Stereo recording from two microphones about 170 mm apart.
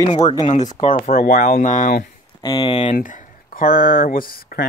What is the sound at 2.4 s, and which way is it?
Speech, 30° left (ahead or behind).